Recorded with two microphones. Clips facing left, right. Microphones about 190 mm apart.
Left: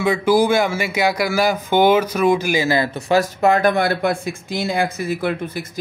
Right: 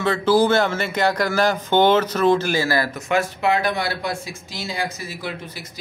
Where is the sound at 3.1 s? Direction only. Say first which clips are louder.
Left 5 dB; 40° left (ahead or behind).